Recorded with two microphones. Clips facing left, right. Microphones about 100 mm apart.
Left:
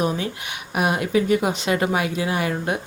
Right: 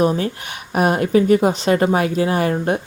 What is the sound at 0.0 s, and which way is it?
Speech, 40° right (ahead or behind).